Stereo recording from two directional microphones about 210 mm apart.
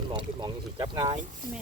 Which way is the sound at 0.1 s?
20° right (ahead or behind).